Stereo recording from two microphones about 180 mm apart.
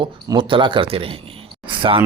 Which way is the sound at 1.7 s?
30° right (ahead or behind).